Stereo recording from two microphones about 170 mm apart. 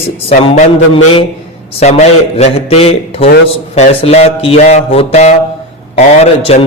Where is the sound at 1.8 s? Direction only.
40° left (ahead or behind).